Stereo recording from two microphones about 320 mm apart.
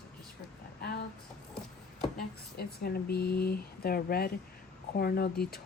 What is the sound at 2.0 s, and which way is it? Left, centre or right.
Speech, left.